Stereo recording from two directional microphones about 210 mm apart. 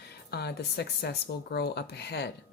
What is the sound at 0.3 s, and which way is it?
A woman's voice, 50° left (ahead or behind).